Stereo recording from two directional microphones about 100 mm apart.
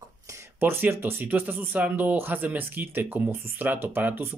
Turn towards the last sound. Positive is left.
turn(degrees=-20)  # may be behind; listen again after turning